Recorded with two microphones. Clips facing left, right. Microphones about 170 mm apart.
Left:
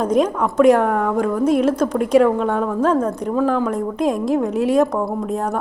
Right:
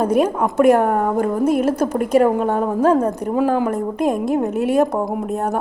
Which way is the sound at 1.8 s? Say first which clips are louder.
Left 1 dB; 5° right (ahead or behind).